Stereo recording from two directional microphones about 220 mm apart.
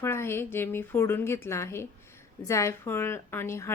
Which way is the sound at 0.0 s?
10° left (ahead or behind).